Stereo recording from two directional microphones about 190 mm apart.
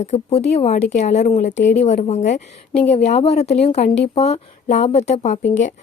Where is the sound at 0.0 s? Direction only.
35° left (ahead or behind).